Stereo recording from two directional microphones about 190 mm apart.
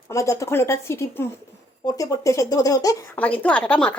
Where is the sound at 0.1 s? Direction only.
15° left (ahead or behind).